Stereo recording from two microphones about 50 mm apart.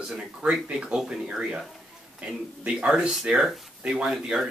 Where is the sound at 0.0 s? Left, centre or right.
Centre.